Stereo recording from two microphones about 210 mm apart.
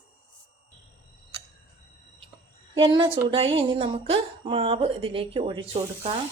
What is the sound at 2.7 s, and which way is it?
A woman's voice, 25° right (ahead or behind).